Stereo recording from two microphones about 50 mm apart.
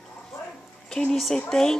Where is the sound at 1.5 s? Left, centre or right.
Centre.